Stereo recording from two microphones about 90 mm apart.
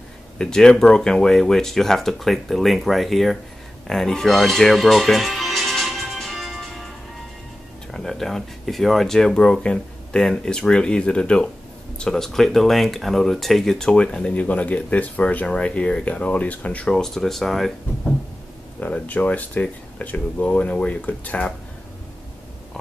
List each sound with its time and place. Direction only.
0.4 s speech: 5° left (ahead or behind)
3.8 s music: 5° left (ahead or behind)
7.9 s speech: 5° left (ahead or behind)
18.8 s speech: 15° left (ahead or behind)